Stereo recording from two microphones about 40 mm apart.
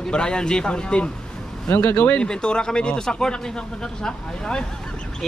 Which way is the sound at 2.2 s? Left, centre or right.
Left.